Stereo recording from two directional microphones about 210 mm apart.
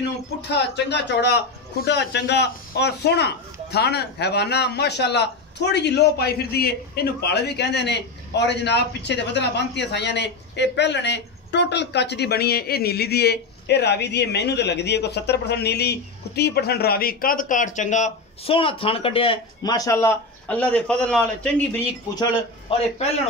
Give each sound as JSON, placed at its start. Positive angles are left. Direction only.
{"t": 0.5, "sound": "a man's voice", "side_deg": 55}
{"t": 22.7, "sound": "speech", "side_deg": 25}